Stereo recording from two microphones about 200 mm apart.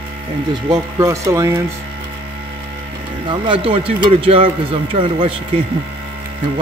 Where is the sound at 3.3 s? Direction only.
25° right (ahead or behind).